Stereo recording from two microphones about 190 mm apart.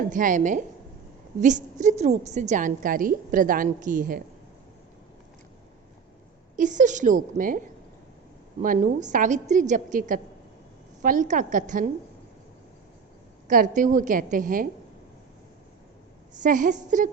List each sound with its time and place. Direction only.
0.0 s a woman's voice: 45° right (ahead or behind)
6.6 s a woman's voice: 40° right (ahead or behind)
8.6 s a woman's voice: 40° right (ahead or behind)
13.5 s a woman's voice: 45° right (ahead or behind)
16.3 s a woman's voice: 40° right (ahead or behind)